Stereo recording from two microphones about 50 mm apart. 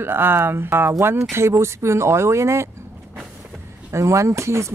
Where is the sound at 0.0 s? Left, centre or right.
Right.